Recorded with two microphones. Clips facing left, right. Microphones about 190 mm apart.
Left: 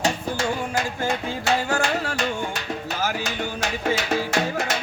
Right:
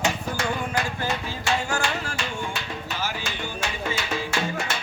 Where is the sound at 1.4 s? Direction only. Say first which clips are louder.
Left 3 dB; 60° left (ahead or behind).